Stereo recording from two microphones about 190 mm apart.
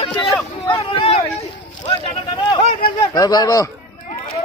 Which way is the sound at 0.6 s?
25° left (ahead or behind).